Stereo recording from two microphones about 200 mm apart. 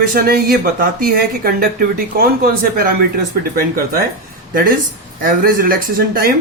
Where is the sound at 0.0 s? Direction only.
50° right (ahead or behind).